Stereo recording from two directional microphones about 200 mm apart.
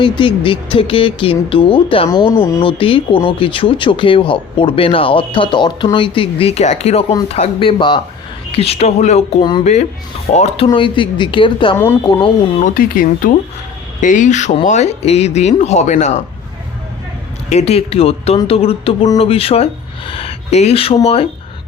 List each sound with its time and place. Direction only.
0.0 s speech: 25° left (ahead or behind)
7.1 s speech: 20° left (ahead or behind)
9.4 s speech: 20° left (ahead or behind)
12.6 s speech: 45° left (ahead or behind)
17.5 s speech: 30° left (ahead or behind)